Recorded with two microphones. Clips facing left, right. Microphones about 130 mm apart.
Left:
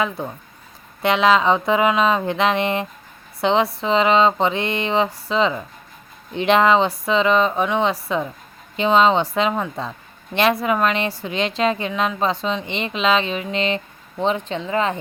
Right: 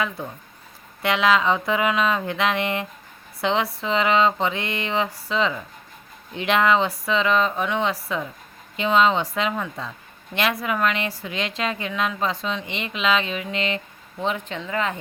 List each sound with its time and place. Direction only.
1.0 s a woman's voice: 25° left (ahead or behind)